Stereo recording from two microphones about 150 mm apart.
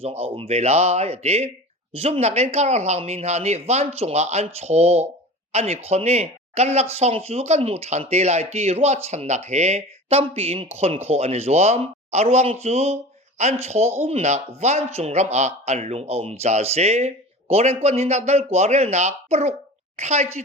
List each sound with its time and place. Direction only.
0.0 s speech: 40° right (ahead or behind)